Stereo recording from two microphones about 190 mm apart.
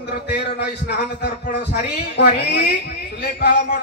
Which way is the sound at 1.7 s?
55° left (ahead or behind).